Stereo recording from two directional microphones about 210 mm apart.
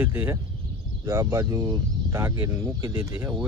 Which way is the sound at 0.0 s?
10° right (ahead or behind).